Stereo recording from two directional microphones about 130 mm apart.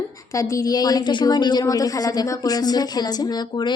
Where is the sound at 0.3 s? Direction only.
25° left (ahead or behind).